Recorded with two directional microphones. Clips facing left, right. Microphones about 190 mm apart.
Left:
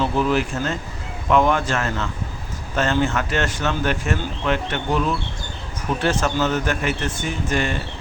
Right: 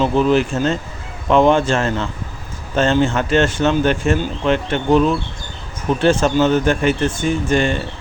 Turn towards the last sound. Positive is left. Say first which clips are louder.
# right 7 dB
turn(degrees=-30)  # may be behind; listen again after turning